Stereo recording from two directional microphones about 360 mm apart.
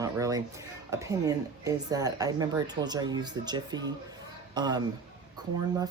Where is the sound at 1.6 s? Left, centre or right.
Centre.